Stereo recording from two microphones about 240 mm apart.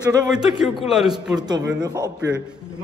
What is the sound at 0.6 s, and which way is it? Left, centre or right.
Speech, centre.